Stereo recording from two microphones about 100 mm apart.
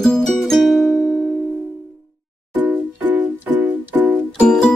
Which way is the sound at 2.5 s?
20° right (ahead or behind).